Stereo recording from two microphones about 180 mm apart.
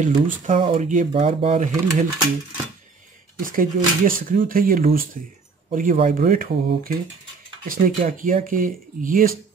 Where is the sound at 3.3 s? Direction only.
50° right (ahead or behind).